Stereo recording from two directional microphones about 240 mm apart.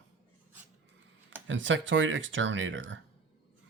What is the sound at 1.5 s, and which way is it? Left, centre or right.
Speech, right.